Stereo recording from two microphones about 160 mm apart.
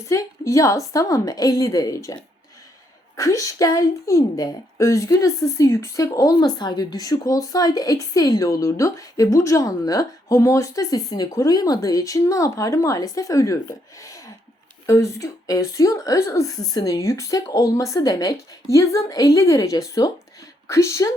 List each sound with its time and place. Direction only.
0.0 s a woman's voice: 20° left (ahead or behind)
3.2 s a woman's voice: 20° left (ahead or behind)